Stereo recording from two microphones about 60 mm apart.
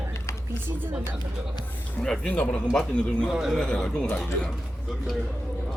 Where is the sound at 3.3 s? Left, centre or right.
Centre.